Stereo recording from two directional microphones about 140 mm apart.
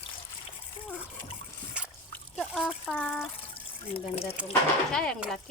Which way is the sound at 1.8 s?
10° right (ahead or behind).